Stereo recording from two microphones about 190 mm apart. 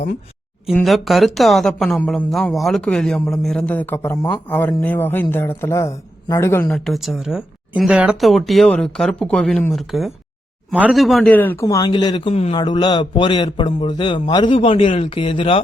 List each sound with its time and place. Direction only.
0.7 s speech: centre (ahead or behind)
6.7 s a man's voice: centre (ahead or behind); by 15.6 s 30° left (ahead or behind)